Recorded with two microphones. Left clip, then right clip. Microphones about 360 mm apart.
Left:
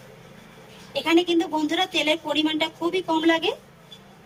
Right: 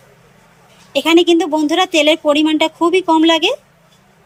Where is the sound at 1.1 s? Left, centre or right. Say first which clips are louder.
Right 9 dB; centre.